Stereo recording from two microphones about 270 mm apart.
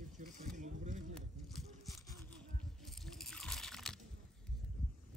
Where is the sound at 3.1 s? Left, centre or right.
Centre.